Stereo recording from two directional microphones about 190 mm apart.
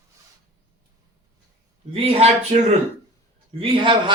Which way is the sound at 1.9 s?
30° right (ahead or behind).